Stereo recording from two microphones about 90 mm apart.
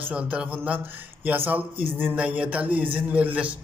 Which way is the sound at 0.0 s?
15° right (ahead or behind).